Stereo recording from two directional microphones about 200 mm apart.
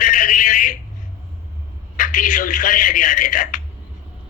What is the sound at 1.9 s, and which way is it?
A man's voice, 40° left (ahead or behind).